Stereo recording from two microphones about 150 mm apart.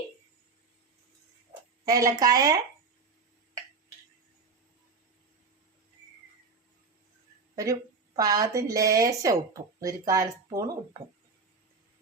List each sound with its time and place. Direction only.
1.8 s speech: 20° right (ahead or behind)
7.5 s a woman's voice: 20° right (ahead or behind)